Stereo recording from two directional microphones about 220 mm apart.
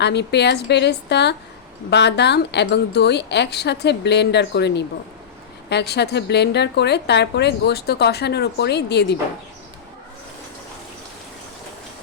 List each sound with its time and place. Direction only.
0.0 s a woman's voice: 50° left (ahead or behind)